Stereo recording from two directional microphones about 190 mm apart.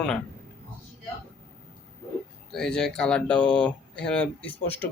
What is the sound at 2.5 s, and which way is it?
Speech, 5° left (ahead or behind).